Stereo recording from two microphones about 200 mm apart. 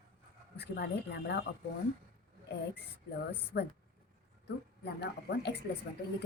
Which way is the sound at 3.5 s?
55° left (ahead or behind).